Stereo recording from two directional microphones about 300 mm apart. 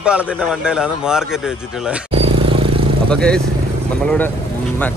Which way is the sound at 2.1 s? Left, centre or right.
Centre.